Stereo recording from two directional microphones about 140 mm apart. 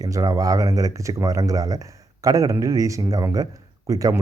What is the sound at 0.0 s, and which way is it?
Speech, 25° right (ahead or behind).